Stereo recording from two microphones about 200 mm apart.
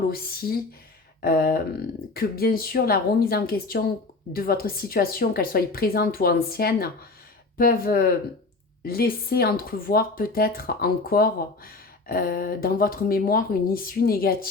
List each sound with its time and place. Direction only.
0.1 s speech: 50° left (ahead or behind)